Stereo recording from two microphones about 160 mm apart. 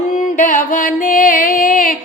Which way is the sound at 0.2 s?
55° left (ahead or behind).